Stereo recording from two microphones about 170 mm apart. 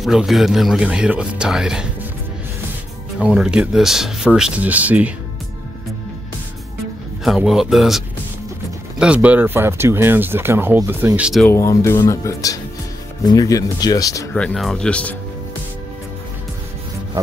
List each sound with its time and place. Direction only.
0.0 s speech: centre (ahead or behind)
3.2 s speech: 5° right (ahead or behind)
7.2 s speech: centre (ahead or behind)
11.4 s speech: 15° left (ahead or behind)
14.3 s speech: 5° left (ahead or behind)